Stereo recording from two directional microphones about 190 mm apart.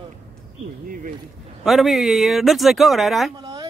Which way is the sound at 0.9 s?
45° right (ahead or behind).